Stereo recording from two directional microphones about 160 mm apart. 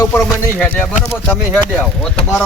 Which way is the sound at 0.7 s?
15° left (ahead or behind).